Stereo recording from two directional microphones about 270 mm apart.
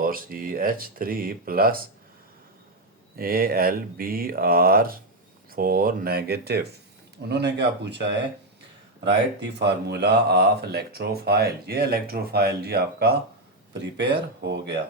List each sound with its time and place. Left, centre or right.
0.0 s speech: right
3.2 s speech: right
9.4 s speech: right